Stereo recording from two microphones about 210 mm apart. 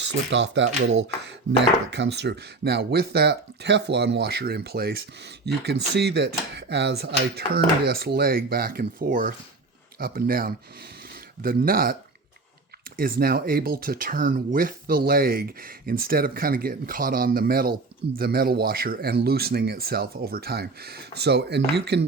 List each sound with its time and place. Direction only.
0.0 s speech: 60° right (ahead or behind); by 11.9 s 45° right (ahead or behind)
13.0 s speech: 45° right (ahead or behind)